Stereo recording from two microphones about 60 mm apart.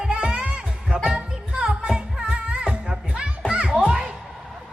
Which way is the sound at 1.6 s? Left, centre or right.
Right.